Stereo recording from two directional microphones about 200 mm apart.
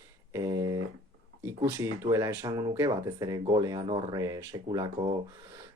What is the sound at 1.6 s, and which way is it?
Speech, 15° right (ahead or behind).